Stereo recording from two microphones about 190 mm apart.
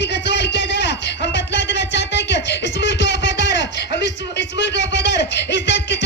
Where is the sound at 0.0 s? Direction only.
65° left (ahead or behind).